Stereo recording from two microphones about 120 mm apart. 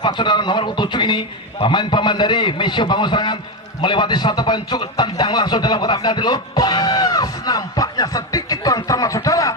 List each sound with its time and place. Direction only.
0.0 s a man's voice: 40° left (ahead or behind)